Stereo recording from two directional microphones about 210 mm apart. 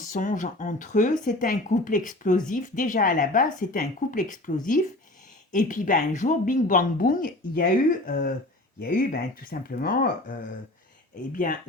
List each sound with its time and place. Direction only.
0.0 s speech: 40° left (ahead or behind)